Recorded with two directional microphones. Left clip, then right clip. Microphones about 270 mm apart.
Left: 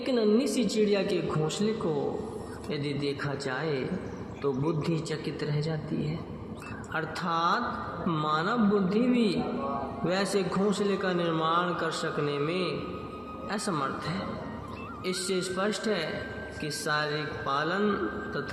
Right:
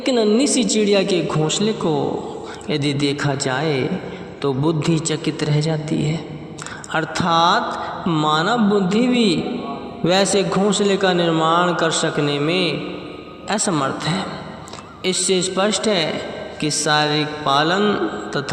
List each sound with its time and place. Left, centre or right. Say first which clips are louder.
0.0 s a man's voice: right 9 dB; right
6.9 s a man's voice: right 12 dB; right